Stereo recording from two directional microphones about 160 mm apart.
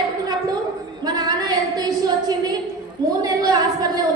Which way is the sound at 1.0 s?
25° right (ahead or behind).